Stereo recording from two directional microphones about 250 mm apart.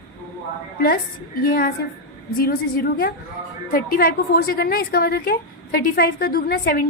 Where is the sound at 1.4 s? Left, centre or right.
Left.